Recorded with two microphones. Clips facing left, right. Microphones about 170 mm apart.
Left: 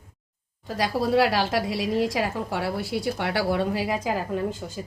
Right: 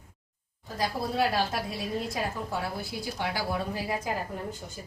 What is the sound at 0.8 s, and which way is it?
A woman's voice, 90° left.